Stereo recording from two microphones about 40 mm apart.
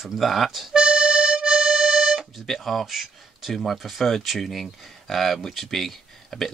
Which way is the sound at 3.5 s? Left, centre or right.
Centre.